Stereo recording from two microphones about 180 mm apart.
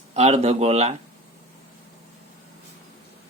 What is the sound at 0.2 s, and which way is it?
Speech, 35° right (ahead or behind).